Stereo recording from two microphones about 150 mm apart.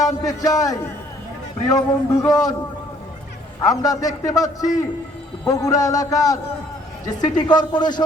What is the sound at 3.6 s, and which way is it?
A man's voice, 25° left (ahead or behind).